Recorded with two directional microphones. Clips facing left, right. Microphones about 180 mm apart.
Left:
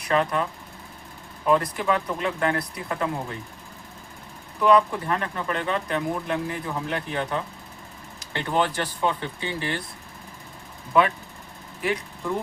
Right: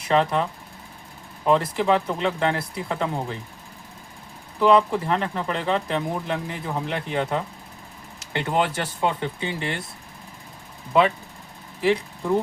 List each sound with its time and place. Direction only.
0.0 s speech: 25° right (ahead or behind)
1.5 s speech: 25° right (ahead or behind)
4.6 s speech: 25° right (ahead or behind)